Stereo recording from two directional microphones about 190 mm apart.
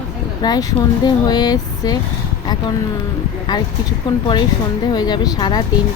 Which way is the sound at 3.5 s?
20° left (ahead or behind).